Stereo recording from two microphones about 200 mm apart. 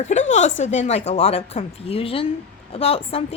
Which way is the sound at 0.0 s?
35° left (ahead or behind).